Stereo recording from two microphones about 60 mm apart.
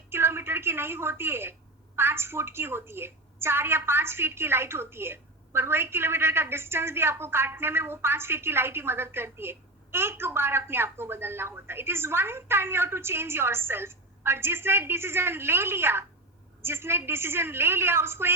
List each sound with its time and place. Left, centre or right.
0.1 s a woman's voice: right